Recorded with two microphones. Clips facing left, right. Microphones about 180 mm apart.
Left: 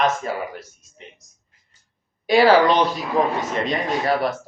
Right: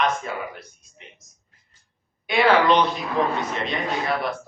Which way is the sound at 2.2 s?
35° left (ahead or behind).